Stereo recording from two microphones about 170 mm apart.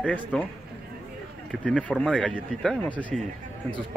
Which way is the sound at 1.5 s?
5° left (ahead or behind).